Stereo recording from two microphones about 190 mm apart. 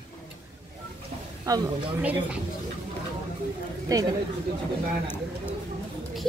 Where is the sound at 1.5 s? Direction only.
20° right (ahead or behind).